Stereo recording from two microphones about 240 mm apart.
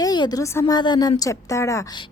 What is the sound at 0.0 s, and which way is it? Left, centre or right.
A woman's voice, centre.